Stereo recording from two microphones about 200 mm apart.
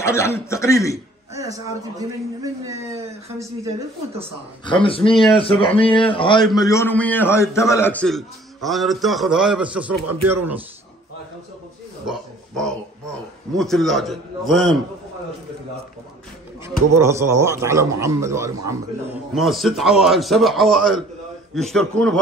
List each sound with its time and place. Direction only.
0.0 s a man's voice: 15° left (ahead or behind)
1.3 s a man's voice: 15° right (ahead or behind)
4.6 s a man's voice: 25° left (ahead or behind); by 10.6 s 10° right (ahead or behind)
12.1 s a sound: centre (ahead or behind)
13.6 s a man's voice: centre (ahead or behind)
16.6 s a man's voice: 15° right (ahead or behind)
19.3 s a man's voice: centre (ahead or behind)